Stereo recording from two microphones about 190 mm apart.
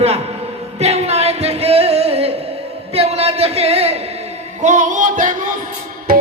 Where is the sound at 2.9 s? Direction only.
30° right (ahead or behind).